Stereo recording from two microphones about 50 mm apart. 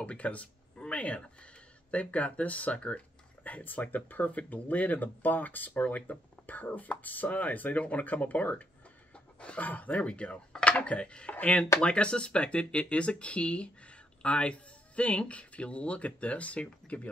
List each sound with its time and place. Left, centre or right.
0.0 s speech: left